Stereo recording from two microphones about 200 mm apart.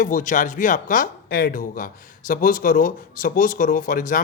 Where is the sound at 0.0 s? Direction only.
40° left (ahead or behind).